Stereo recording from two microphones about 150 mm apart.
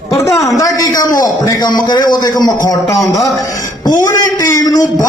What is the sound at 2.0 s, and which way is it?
Speech, 25° left (ahead or behind).